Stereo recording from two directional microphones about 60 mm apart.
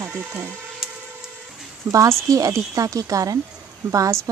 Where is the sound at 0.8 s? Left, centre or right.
Centre.